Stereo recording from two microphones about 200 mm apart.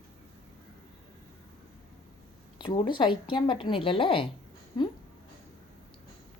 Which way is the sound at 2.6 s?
25° left (ahead or behind).